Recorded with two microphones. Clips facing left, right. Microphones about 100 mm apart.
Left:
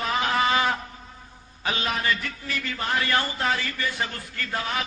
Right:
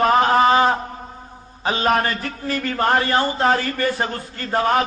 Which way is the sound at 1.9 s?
45° right (ahead or behind).